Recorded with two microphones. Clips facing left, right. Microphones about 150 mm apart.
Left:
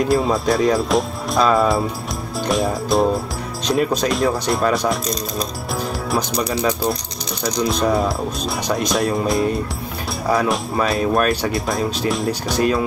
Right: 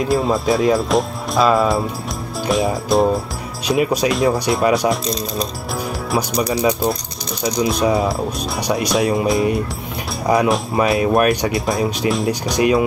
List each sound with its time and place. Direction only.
0.0 s speech: centre (ahead or behind)
6.1 s speech: centre (ahead or behind)
7.8 s speech: centre (ahead or behind)
10.2 s speech: 15° right (ahead or behind); by 12.3 s centre (ahead or behind)
12.5 s speech: 15° right (ahead or behind)